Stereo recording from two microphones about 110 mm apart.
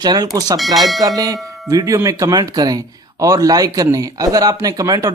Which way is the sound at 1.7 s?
30° right (ahead or behind).